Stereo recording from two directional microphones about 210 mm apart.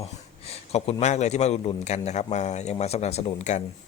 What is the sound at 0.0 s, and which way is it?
A man's voice, 30° left (ahead or behind).